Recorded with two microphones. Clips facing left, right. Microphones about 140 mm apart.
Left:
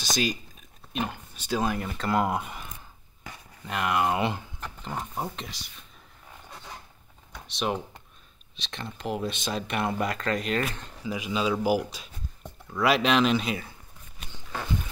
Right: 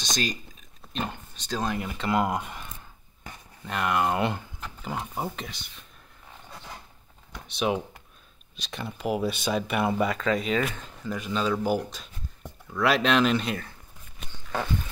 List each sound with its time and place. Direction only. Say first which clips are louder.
0.0 s speech: left 2 dB; 5° left (ahead or behind)
7.4 s speech: right 3 dB; 5° right (ahead or behind)